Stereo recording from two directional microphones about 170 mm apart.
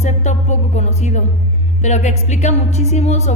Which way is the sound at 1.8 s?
45° left (ahead or behind).